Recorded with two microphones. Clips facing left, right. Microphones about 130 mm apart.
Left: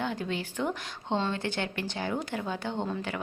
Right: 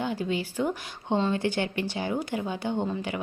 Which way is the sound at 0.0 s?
5° right (ahead or behind).